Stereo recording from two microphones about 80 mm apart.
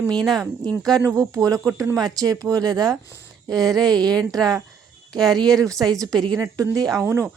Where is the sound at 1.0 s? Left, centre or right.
Right.